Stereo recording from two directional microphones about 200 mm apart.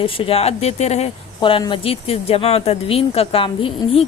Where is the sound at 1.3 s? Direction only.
20° left (ahead or behind).